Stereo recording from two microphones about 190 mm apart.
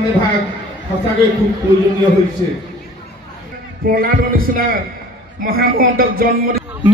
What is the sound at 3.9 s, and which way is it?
Speech, 50° right (ahead or behind).